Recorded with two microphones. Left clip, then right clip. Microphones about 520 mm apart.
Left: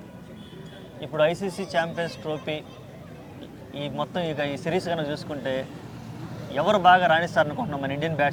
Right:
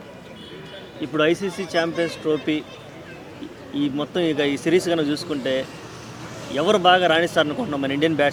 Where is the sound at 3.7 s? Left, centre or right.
Left.